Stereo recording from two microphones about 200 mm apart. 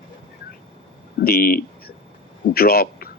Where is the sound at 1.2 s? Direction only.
50° left (ahead or behind).